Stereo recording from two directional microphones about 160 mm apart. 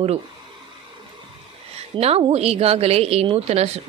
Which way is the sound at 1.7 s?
40° right (ahead or behind).